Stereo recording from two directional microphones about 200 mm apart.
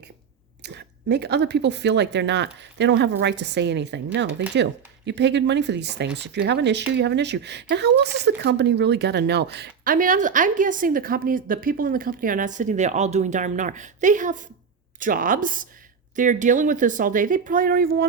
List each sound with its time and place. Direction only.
0.6 s speech: 55° right (ahead or behind)